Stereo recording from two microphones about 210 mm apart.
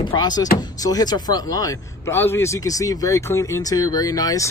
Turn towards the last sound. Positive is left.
turn(degrees=15)  # may be behind; listen again after turning